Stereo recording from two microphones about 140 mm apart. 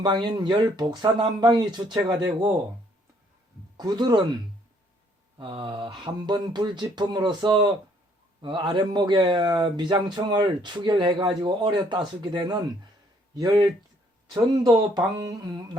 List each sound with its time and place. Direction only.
0.0 s speech: 30° right (ahead or behind)
3.8 s speech: 30° right (ahead or behind)
5.4 s speech: 35° right (ahead or behind)